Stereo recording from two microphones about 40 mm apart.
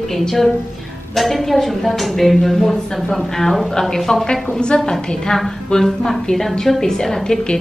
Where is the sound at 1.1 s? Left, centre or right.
Centre; by 4.9 s left.